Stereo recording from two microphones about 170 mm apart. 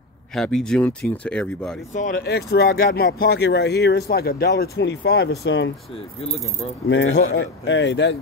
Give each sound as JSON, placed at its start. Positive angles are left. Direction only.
{"t": 0.3, "sound": "speech", "side_deg": 5}
{"t": 2.2, "sound": "speech", "side_deg": 70}
{"t": 6.9, "sound": "speech", "side_deg": 90}